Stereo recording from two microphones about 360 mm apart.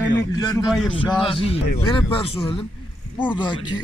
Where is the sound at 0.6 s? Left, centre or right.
Centre.